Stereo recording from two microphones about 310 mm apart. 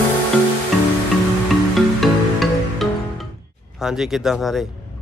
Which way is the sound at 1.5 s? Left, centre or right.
Centre.